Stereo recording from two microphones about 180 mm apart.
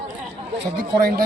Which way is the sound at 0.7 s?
55° right (ahead or behind).